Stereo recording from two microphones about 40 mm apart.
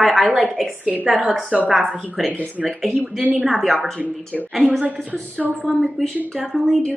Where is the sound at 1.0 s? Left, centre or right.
Centre.